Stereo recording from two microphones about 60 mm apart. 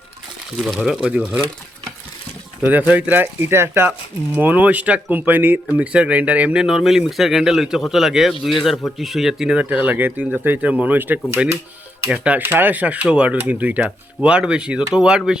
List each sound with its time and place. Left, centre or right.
0.9 s speech: centre
2.7 s speech: right
3.5 s speech: right
4.4 s speech: right
6.6 s a man's voice: centre
9.6 s speech: right
10.6 s speech: centre
10.9 s speech: right
12.1 s speech: right
12.4 s speech: right; by 15.2 s centre